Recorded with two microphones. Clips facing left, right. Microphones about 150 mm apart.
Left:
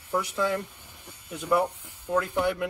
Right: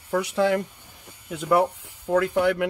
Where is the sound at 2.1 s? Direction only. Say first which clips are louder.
Right 5 dB; 75° right (ahead or behind).